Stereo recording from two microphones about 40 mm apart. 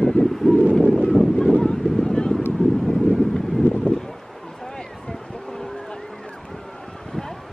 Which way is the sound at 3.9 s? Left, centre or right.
Left.